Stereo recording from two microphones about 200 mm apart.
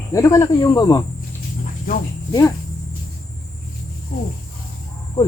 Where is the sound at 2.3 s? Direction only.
15° left (ahead or behind).